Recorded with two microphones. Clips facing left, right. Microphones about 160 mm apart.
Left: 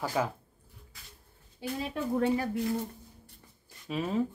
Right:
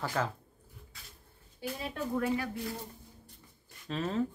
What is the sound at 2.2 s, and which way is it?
Speech, 30° left (ahead or behind).